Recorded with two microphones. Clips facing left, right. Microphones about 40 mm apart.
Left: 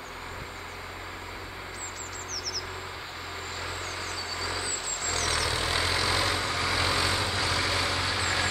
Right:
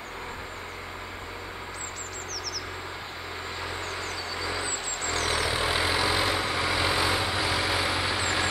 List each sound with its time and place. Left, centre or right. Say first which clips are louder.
4.0 s vehicle: right 1 dB; centre
5.2 s vehicle: right 1 dB; right
5.5 s vehicle: right 2 dB; centre